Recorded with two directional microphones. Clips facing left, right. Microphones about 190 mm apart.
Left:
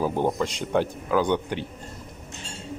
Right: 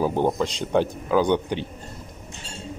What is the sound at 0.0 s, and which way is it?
A man's voice, 20° right (ahead or behind).